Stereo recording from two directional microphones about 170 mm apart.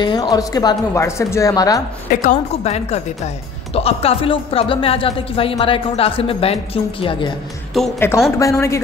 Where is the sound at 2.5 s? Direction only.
40° left (ahead or behind).